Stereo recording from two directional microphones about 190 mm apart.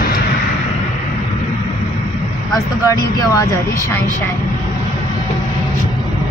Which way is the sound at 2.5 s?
20° left (ahead or behind).